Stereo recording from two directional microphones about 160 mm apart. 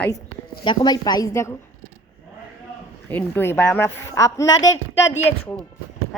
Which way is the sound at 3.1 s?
15° left (ahead or behind).